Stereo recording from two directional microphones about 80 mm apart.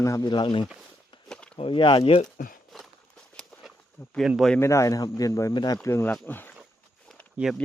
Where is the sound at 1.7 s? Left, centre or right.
Left.